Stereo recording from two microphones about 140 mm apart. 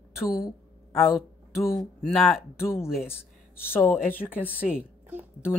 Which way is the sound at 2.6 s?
15° left (ahead or behind).